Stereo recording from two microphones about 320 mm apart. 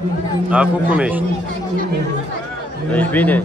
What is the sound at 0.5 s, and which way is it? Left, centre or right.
Speech, centre.